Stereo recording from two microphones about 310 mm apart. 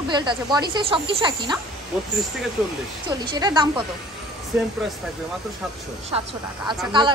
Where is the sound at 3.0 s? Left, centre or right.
Centre.